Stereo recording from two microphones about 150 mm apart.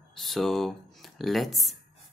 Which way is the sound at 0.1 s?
Centre (ahead or behind).